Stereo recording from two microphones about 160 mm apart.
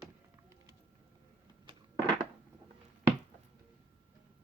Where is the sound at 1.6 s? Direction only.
25° right (ahead or behind).